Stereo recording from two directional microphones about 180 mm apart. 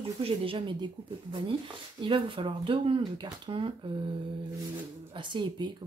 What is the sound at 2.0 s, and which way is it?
Speech, 30° right (ahead or behind).